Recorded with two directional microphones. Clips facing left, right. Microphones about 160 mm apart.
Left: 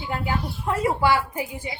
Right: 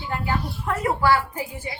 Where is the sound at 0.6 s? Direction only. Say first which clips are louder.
Even; 20° left (ahead or behind).